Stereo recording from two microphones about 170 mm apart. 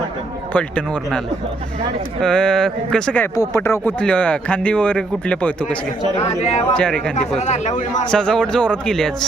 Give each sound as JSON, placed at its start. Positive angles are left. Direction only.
{"t": 0.5, "sound": "speech", "side_deg": 10}
{"t": 2.2, "sound": "speech", "side_deg": 5}
{"t": 6.1, "sound": "speech", "side_deg": 40}
{"t": 6.7, "sound": "speech", "side_deg": 5}
{"t": 7.3, "sound": "speech", "side_deg": 40}
{"t": 8.1, "sound": "speech", "side_deg": 5}